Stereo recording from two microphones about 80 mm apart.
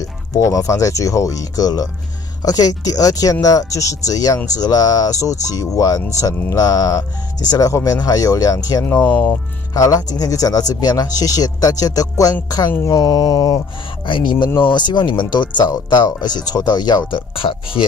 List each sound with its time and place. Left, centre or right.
0.3 s speech: left
8.8 s speech: left
9.8 s speech: left
14.0 s speech: left
17.1 s speech: left